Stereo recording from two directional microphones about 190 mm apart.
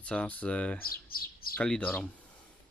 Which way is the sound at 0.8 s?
50° left (ahead or behind).